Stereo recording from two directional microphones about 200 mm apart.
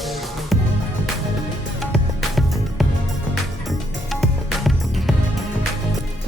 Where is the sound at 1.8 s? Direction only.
Centre (ahead or behind).